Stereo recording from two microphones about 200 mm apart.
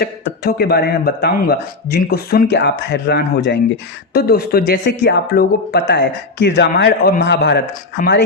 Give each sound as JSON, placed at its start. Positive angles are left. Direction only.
{"t": 0.0, "sound": "speech", "side_deg": 50}
{"t": 7.9, "sound": "speech", "side_deg": 50}